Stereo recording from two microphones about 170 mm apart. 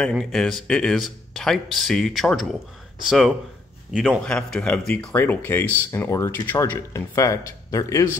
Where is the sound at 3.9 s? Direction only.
Centre (ahead or behind); by 8.0 s 20° left (ahead or behind).